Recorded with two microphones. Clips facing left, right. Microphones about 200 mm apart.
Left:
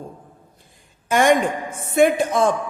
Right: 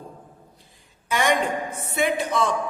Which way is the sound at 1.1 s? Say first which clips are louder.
Left 6 dB; 50° left (ahead or behind).